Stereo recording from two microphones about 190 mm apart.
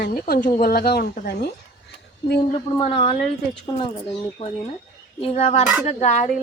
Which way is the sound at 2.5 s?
30° left (ahead or behind).